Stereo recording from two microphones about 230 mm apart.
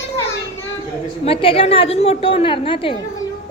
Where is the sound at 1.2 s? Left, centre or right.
Left.